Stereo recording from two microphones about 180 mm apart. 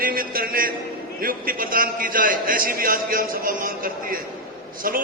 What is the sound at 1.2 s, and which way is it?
A man's voice, 50° right (ahead or behind).